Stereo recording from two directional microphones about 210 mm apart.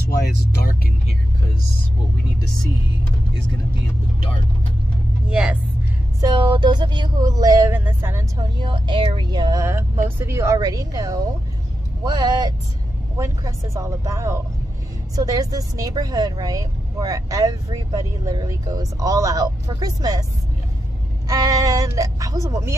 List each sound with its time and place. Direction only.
0.1 s vehicle: 50° left (ahead or behind)
5.3 s music: 5° right (ahead or behind)
6.2 s a sound: 20° right (ahead or behind)
12.0 s speech: 20° right (ahead or behind)
21.3 s speech: 15° right (ahead or behind)